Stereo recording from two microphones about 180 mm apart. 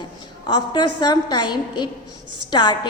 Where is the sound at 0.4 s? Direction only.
25° left (ahead or behind).